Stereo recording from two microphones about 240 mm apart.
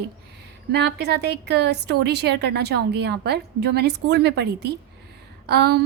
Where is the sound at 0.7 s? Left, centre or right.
Right.